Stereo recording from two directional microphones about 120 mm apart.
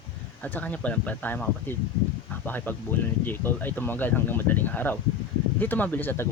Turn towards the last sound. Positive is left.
turn(degrees=15)  # may be behind; listen again after turning